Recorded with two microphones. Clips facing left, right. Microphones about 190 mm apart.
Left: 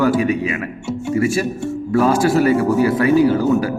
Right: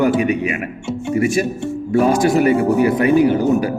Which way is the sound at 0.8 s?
20° right (ahead or behind).